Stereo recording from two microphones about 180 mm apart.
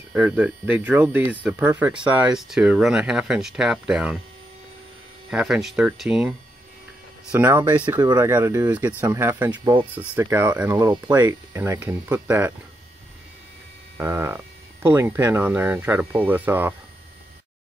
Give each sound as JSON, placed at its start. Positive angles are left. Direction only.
{"t": 0.1, "sound": "speech", "side_deg": -5}
{"t": 5.3, "sound": "speech", "side_deg": -5}
{"t": 7.3, "sound": "speech", "side_deg": -10}
{"t": 9.5, "sound": "speech", "side_deg": -25}
{"t": 9.9, "sound": "speech", "side_deg": -10}
{"t": 13.9, "sound": "speech", "side_deg": -15}